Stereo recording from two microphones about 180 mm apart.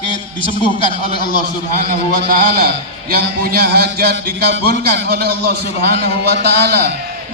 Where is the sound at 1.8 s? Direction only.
50° right (ahead or behind).